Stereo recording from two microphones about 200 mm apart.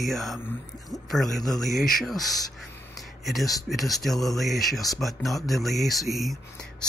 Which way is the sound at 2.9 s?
Centre (ahead or behind).